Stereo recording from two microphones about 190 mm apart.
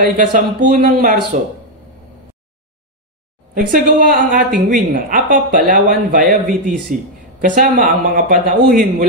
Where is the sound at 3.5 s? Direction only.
45° right (ahead or behind).